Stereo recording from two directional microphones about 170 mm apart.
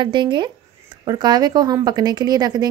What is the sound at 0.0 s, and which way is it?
A woman's voice, 25° right (ahead or behind).